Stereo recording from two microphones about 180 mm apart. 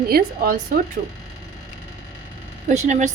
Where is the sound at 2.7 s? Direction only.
40° right (ahead or behind).